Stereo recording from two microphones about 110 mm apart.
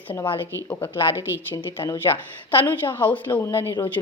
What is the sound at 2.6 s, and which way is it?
Speech, 20° left (ahead or behind).